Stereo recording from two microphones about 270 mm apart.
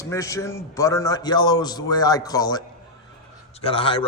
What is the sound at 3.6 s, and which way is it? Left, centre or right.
Speech, centre.